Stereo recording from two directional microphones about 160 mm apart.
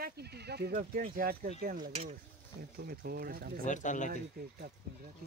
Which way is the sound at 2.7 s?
70° right (ahead or behind).